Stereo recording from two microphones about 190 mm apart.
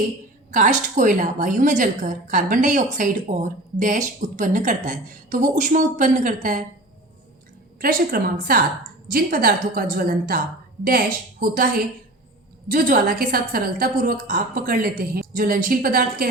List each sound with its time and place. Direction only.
0.5 s a woman's voice: 40° right (ahead or behind)
7.8 s a woman's voice: 50° right (ahead or behind)